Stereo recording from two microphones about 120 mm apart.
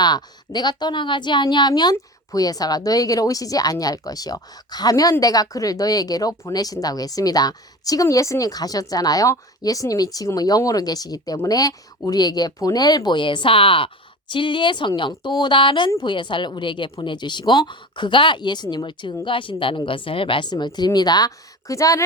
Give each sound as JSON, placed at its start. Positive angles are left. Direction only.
{"t": 0.0, "sound": "speech", "side_deg": 35}